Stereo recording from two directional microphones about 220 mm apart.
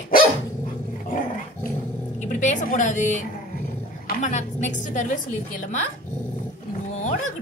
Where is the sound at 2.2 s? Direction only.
35° left (ahead or behind).